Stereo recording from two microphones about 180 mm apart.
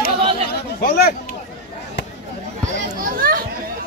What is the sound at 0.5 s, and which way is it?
Speech, 60° left (ahead or behind).